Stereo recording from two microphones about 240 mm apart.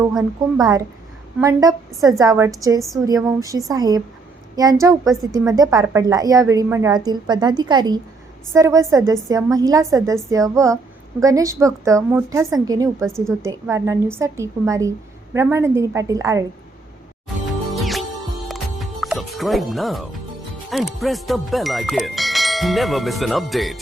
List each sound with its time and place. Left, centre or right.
0.0 s speech: centre
0.6 s a woman's voice: centre
13.1 s speech: centre
13.4 s a woman's voice: centre
17.7 s music: centre
20.7 s speech: centre